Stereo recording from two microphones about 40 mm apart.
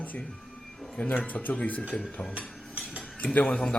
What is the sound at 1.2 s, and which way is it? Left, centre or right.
Speech, left.